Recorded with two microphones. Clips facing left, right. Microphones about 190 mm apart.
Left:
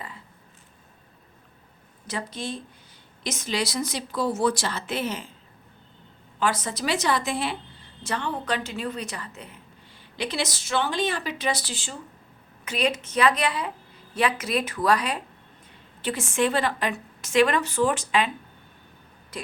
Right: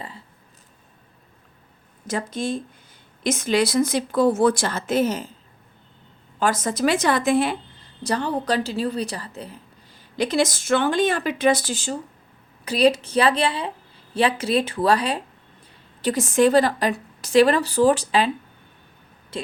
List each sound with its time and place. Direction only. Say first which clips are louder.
2.0 s a woman's voice: right 6 dB; 45° right (ahead or behind)
6.4 s a woman's voice: right 6 dB; 45° right (ahead or behind)
8.0 s a woman's voice: right 6 dB; 40° right (ahead or behind)
19.3 s speech: right 5 dB; 30° right (ahead or behind)